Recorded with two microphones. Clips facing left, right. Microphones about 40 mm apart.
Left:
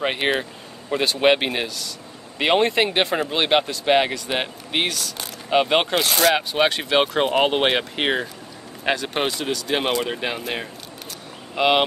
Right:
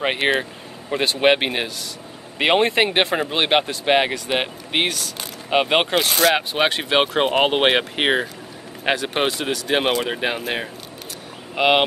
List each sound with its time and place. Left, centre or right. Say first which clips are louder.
0.4 s speech: right 2 dB; centre
6.3 s speech: even; centre
11.5 s speech: right 1 dB; centre